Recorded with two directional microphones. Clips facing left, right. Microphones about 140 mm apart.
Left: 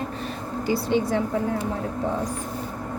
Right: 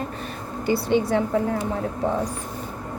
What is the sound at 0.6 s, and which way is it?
Speech, 60° right (ahead or behind).